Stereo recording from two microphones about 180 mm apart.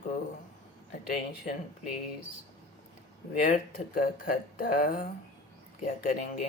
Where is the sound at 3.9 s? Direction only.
50° left (ahead or behind).